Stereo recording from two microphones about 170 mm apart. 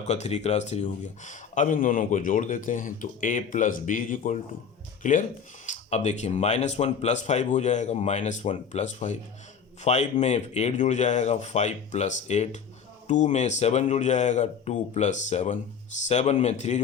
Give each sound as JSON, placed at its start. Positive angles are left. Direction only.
{"t": 0.0, "sound": "speech", "side_deg": 40}